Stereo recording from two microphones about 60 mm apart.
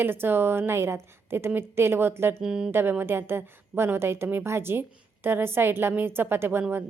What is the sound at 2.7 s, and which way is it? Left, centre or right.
A woman's voice, right.